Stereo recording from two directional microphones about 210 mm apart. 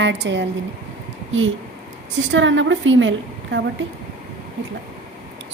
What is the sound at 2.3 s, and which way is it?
Speech, 65° right (ahead or behind).